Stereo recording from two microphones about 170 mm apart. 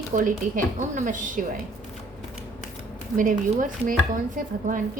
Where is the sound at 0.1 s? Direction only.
50° right (ahead or behind).